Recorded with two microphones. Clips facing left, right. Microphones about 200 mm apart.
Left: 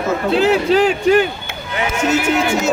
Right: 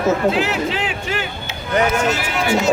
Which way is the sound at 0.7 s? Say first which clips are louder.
Left 11 dB; 40° left (ahead or behind).